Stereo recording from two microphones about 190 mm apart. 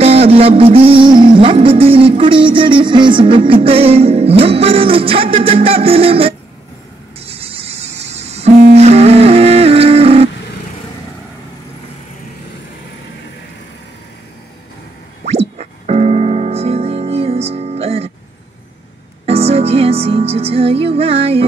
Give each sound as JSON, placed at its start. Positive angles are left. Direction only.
{"t": 0.0, "sound": "music", "side_deg": -30}
{"t": 15.2, "sound": "music", "side_deg": -35}
{"t": 19.2, "sound": "music", "side_deg": -30}